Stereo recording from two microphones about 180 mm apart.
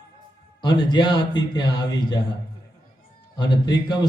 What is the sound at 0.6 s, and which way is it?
A man's voice, 25° left (ahead or behind).